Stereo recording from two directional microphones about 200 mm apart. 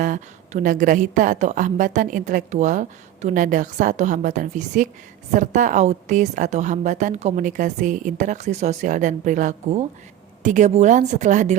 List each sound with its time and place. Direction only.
0.0 s a woman's voice: 40° right (ahead or behind)